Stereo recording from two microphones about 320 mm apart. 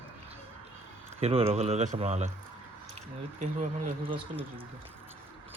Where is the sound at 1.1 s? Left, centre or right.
Centre.